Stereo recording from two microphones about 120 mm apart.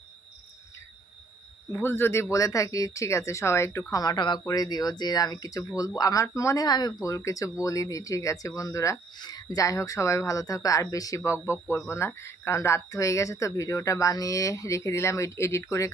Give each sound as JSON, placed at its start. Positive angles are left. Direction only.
{"t": 1.7, "sound": "speech", "side_deg": 20}
{"t": 3.9, "sound": "speech", "side_deg": 35}